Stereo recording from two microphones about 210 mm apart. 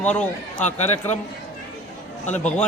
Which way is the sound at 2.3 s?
10° left (ahead or behind).